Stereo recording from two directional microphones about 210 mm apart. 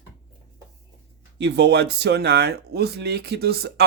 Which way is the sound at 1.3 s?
55° right (ahead or behind).